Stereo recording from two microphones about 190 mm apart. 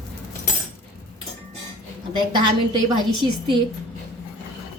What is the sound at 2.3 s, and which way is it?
A woman's voice, 25° right (ahead or behind).